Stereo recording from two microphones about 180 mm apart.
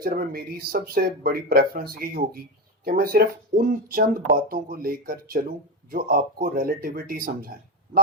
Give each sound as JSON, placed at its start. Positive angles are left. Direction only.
{"t": 0.0, "sound": "speech", "side_deg": -55}